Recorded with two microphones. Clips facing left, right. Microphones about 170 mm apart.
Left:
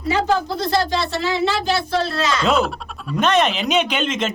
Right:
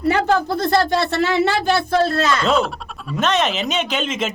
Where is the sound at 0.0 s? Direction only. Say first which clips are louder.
Right 2 dB; 55° right (ahead or behind).